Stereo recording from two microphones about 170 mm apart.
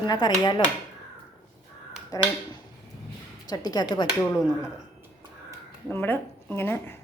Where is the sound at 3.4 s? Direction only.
20° left (ahead or behind).